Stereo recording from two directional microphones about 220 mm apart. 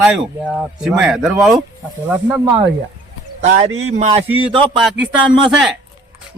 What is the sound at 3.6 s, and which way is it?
A man's voice, 30° right (ahead or behind).